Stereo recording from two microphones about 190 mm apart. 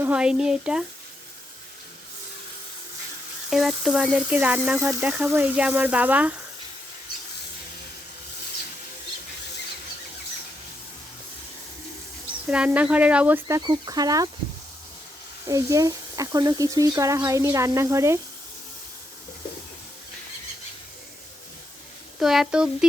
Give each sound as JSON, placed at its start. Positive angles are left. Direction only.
{"t": 0.0, "sound": "speech", "side_deg": -5}
{"t": 3.5, "sound": "speech", "side_deg": 0}
{"t": 12.5, "sound": "speech", "side_deg": -5}
{"t": 13.6, "sound": "speech", "side_deg": -20}
{"t": 15.4, "sound": "speech", "side_deg": -15}
{"t": 22.2, "sound": "speech", "side_deg": 0}